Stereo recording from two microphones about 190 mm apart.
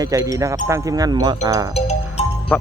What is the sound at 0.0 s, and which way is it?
Speech, 20° right (ahead or behind).